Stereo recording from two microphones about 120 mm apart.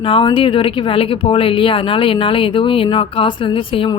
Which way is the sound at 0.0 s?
45° left (ahead or behind).